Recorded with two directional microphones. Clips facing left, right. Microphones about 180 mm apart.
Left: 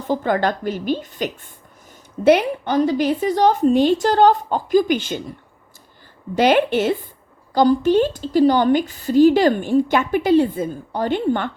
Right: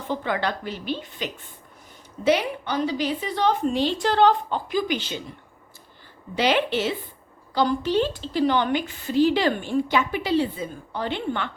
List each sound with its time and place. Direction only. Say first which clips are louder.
0.1 s a woman's voice: left 7 dB; 45° left (ahead or behind)
6.3 s a woman's voice: left 6 dB; 50° left (ahead or behind)